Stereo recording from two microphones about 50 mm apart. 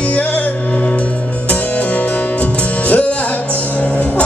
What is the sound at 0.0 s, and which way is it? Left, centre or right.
Music, left.